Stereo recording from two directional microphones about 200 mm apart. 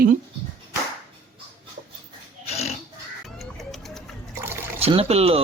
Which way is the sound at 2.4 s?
35° left (ahead or behind).